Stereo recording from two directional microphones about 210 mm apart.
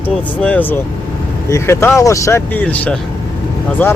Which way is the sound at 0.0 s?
5° left (ahead or behind).